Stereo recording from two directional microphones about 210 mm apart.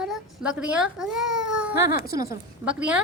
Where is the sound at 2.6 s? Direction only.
5° right (ahead or behind).